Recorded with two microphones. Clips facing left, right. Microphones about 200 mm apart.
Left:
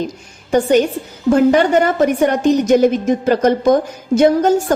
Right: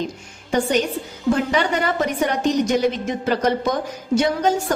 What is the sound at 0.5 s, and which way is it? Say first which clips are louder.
A woman's voice: left 7 dB; 45° left (ahead or behind).